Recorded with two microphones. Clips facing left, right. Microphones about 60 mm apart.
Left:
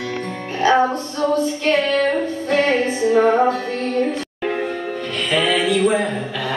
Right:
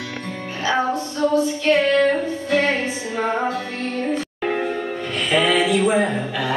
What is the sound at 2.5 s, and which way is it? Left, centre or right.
Music, left.